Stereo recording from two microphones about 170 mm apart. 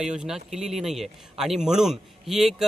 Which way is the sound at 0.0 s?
5° right (ahead or behind).